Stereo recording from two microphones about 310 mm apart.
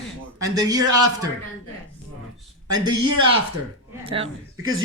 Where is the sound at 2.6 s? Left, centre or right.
Right.